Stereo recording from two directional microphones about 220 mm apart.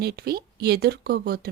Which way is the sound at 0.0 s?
45° right (ahead or behind).